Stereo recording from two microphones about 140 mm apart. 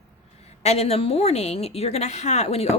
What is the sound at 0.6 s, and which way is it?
A woman's voice, 50° left (ahead or behind).